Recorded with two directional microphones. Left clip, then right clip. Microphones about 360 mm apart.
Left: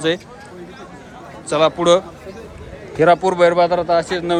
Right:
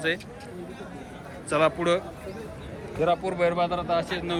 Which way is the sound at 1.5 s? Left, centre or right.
Centre.